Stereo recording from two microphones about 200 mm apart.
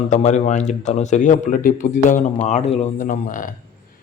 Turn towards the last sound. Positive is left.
turn(degrees=40)  # may be behind; listen again after turning